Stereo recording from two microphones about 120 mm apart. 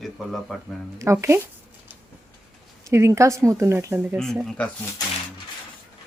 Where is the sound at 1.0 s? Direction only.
25° right (ahead or behind).